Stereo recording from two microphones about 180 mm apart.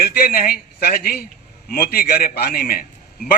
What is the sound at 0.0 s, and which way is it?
A man's voice, 55° left (ahead or behind).